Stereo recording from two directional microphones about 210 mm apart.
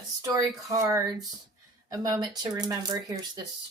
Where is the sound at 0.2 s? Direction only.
15° right (ahead or behind).